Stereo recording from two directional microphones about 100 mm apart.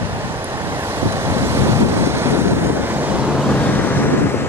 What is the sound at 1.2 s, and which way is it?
Waves, 25° right (ahead or behind).